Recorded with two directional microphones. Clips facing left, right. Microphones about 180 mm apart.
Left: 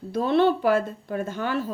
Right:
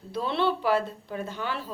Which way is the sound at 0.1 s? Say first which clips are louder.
Left 6 dB; 45° left (ahead or behind).